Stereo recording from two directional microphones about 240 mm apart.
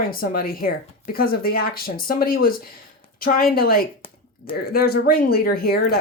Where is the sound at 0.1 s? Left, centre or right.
Left.